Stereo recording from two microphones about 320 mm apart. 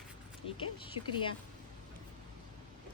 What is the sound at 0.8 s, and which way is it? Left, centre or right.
Speech, centre.